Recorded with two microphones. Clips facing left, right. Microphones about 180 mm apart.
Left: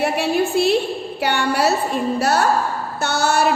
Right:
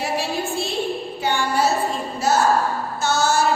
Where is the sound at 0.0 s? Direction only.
65° left (ahead or behind).